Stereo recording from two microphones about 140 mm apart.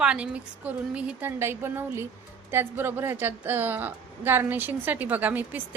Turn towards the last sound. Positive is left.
turn(degrees=-10)  # may be behind; listen again after turning